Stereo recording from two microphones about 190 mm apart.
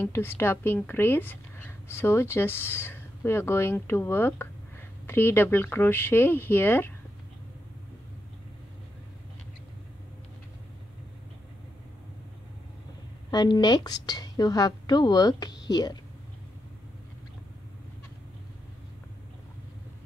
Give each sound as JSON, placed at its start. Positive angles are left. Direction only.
{"t": 0.0, "sound": "a woman's voice", "side_deg": 15}
{"t": 13.3, "sound": "a woman's voice", "side_deg": 20}